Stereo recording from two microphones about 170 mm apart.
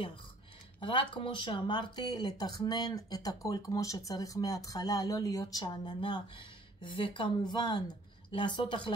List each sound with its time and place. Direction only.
0.7 s speech: 30° left (ahead or behind)